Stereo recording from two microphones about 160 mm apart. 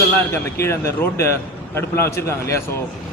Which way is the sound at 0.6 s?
15° left (ahead or behind).